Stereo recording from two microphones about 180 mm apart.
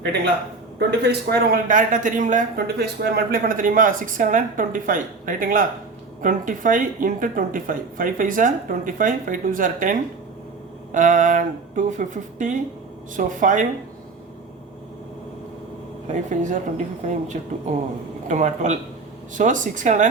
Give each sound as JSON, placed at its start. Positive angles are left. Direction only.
{"t": 0.8, "sound": "speech", "side_deg": -65}
{"t": 16.0, "sound": "speech", "side_deg": -45}